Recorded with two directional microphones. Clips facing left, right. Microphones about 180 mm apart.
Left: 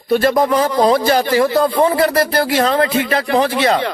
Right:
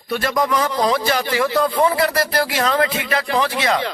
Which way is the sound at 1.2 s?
45° left (ahead or behind).